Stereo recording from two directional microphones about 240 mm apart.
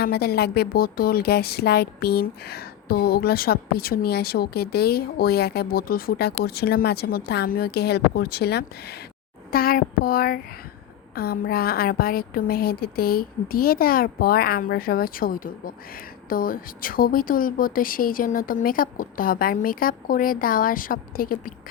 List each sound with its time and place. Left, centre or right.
0.0 s speech: left